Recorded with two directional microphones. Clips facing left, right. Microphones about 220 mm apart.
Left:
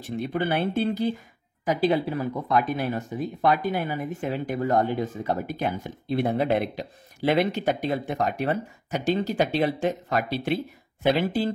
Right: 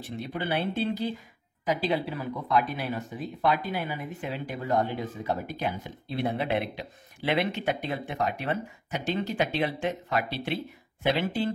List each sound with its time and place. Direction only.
0.3 s speech: 50° left (ahead or behind)